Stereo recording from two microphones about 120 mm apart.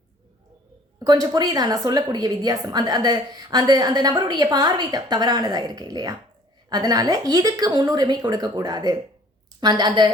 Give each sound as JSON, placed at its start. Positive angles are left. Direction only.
{"t": 0.9, "sound": "a woman's voice", "side_deg": -35}